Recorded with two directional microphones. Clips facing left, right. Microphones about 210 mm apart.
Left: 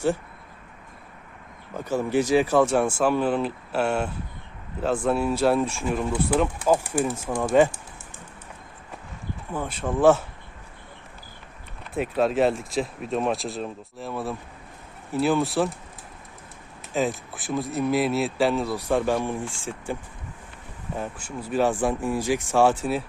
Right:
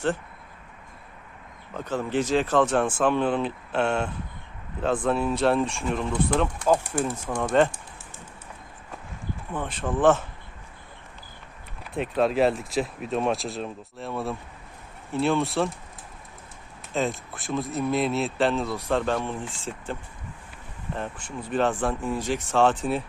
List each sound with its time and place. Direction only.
1.7 s speech: 10° left (ahead or behind)
9.5 s speech: 10° left (ahead or behind)
11.8 s speech: centre (ahead or behind)
16.9 s speech: centre (ahead or behind)